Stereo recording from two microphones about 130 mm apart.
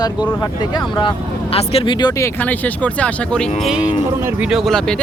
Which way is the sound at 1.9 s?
30° left (ahead or behind).